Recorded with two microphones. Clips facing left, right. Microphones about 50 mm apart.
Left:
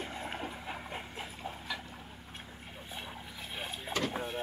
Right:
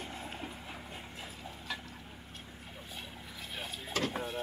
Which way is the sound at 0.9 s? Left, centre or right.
Left.